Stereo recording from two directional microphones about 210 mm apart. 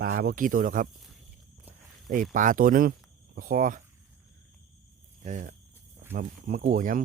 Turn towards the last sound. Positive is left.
turn(degrees=-40)  # may be behind; listen again after turning